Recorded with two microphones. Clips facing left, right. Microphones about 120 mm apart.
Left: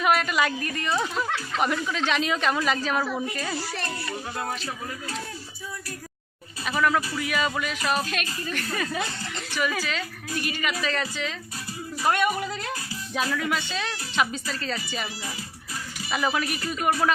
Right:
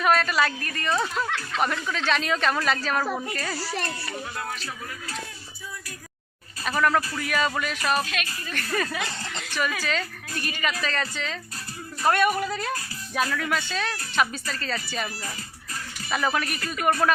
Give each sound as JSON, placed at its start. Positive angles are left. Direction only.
{"t": 0.0, "sound": "a woman's voice", "side_deg": 15}
{"t": 6.7, "sound": "speech", "side_deg": 10}